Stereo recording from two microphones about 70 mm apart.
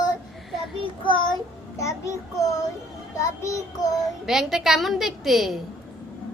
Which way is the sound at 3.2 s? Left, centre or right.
Left.